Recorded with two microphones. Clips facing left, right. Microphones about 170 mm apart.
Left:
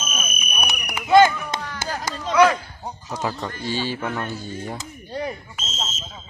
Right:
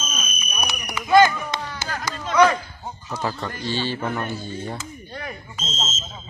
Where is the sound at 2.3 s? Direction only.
10° left (ahead or behind).